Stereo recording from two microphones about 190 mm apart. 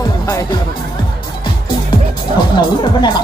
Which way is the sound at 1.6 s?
25° left (ahead or behind).